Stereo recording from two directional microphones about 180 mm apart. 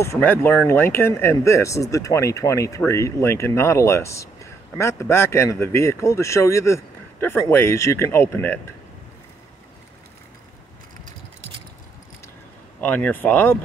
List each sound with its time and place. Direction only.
0.0 s speech: 10° left (ahead or behind)
12.8 s speech: 10° left (ahead or behind)